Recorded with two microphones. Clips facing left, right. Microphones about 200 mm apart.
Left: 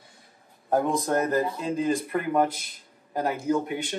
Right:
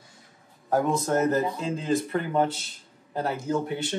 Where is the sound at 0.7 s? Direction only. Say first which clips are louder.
Even; 20° left (ahead or behind).